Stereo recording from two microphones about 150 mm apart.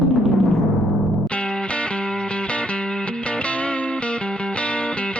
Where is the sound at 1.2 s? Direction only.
5° left (ahead or behind).